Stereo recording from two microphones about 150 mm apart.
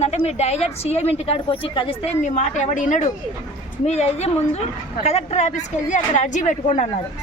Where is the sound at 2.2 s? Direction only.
55° left (ahead or behind).